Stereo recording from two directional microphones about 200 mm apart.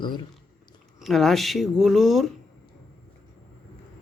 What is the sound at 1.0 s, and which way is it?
Speech, centre (ahead or behind).